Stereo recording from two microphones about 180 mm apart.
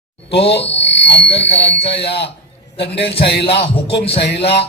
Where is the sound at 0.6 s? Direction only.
35° left (ahead or behind).